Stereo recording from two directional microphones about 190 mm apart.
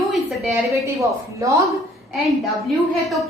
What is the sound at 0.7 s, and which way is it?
Speech, 15° right (ahead or behind).